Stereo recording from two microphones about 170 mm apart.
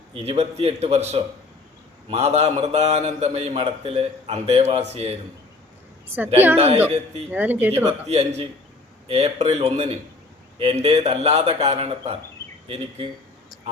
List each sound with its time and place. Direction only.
0.3 s a man's voice: 35° right (ahead or behind)
7.3 s speech: 10° right (ahead or behind)
8.0 s a man's voice: 40° right (ahead or behind)